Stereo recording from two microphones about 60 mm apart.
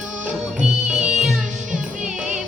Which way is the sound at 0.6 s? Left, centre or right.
Centre.